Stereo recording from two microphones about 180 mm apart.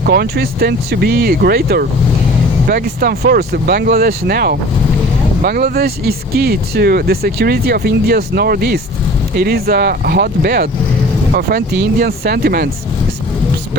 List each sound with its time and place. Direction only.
0.0 s speech: 60° right (ahead or behind)